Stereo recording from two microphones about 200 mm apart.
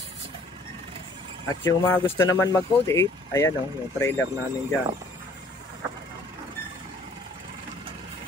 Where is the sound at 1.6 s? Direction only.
15° left (ahead or behind).